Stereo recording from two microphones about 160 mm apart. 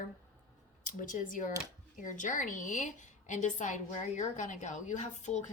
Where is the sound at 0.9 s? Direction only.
55° left (ahead or behind).